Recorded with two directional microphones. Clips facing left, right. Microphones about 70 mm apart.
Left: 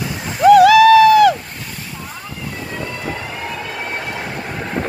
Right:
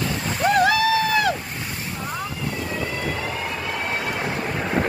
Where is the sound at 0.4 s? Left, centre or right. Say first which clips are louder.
Left 11 dB; left.